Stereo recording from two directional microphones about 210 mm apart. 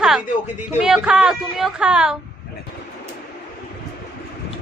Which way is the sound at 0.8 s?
5° right (ahead or behind).